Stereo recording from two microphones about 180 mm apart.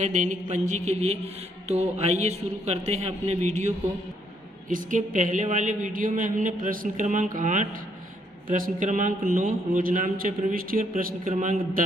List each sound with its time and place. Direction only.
0.0 s a man's voice: 45° right (ahead or behind)